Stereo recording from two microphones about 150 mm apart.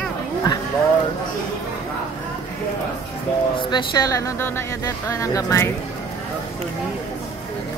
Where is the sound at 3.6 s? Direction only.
30° left (ahead or behind).